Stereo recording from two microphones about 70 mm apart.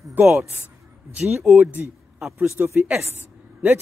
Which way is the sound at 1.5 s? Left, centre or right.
Centre.